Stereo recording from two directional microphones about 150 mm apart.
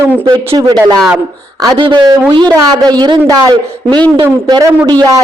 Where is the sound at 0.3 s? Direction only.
25° right (ahead or behind).